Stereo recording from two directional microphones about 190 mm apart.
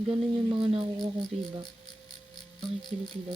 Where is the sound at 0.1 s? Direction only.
30° right (ahead or behind).